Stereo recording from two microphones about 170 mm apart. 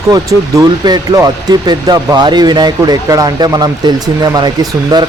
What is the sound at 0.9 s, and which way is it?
Speech, 20° right (ahead or behind).